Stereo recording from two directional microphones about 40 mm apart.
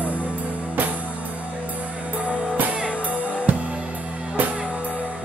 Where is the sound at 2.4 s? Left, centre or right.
Right.